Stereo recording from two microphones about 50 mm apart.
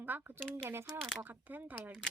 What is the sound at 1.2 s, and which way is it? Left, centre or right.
Speech, right.